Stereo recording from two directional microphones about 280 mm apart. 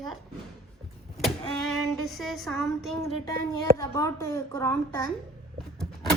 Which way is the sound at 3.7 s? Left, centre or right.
Centre.